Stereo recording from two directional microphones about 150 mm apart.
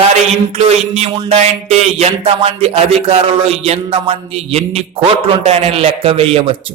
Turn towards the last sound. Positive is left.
turn(degrees=-40)  # may be behind; listen again after turning